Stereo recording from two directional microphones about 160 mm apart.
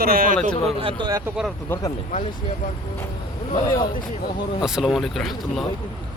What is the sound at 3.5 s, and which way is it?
Speech, 30° left (ahead or behind).